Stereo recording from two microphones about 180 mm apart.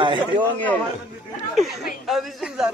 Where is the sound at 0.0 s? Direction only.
25° right (ahead or behind).